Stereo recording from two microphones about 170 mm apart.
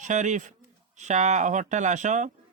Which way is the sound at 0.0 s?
45° right (ahead or behind).